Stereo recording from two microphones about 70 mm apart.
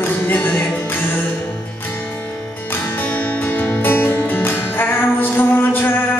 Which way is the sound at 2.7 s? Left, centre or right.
Left.